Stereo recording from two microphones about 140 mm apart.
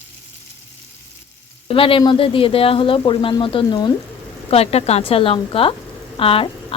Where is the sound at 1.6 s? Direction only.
40° left (ahead or behind).